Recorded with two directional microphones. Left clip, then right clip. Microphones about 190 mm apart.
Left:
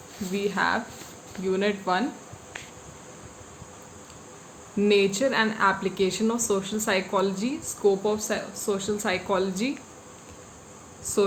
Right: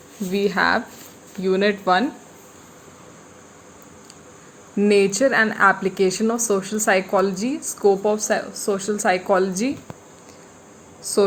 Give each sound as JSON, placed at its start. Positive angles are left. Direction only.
{"t": 0.3, "sound": "speech", "side_deg": -35}
{"t": 4.8, "sound": "speech", "side_deg": -30}